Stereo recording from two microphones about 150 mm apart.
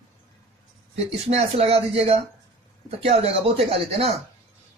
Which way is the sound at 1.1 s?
45° right (ahead or behind).